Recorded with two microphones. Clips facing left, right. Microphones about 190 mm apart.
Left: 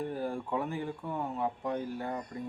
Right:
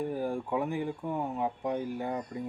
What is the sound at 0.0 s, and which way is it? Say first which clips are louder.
Speech: right 3 dB; 15° right (ahead or behind).